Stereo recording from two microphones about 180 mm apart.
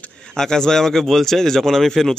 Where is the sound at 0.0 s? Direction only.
5° left (ahead or behind).